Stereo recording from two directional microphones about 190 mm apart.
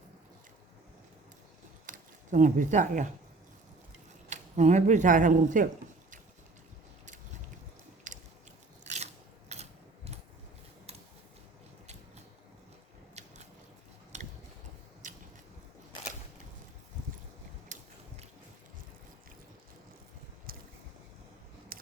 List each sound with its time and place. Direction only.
1.9 s speech: 45° right (ahead or behind)
4.3 s speech: 35° right (ahead or behind)
8.1 s biting: 40° right (ahead or behind)
9.5 s a sound: 35° right (ahead or behind)
13.2 s biting: 35° right (ahead or behind)
14.1 s a sound: 40° right (ahead or behind)
17.7 s biting: 40° right (ahead or behind)
20.5 s a sound: 50° right (ahead or behind)
21.7 s scissors: 50° right (ahead or behind)